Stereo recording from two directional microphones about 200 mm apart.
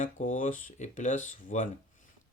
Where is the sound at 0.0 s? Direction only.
40° left (ahead or behind).